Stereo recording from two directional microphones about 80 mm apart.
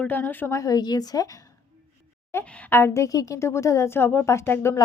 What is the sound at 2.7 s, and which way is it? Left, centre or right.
Speech, left.